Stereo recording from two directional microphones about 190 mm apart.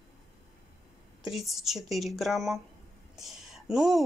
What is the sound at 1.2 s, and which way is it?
Speech, centre (ahead or behind).